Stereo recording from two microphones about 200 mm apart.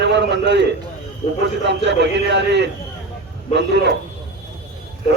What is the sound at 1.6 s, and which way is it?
A man's voice, 60° right (ahead or behind).